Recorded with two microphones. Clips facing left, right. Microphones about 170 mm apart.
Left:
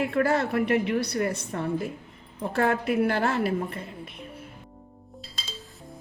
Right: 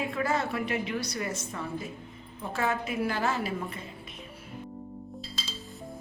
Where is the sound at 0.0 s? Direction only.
65° left (ahead or behind).